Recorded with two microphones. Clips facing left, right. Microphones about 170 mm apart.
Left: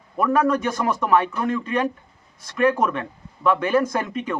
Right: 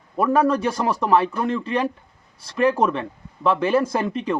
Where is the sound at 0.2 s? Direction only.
30° right (ahead or behind).